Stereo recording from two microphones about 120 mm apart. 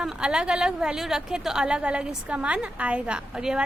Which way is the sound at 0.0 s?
5° right (ahead or behind).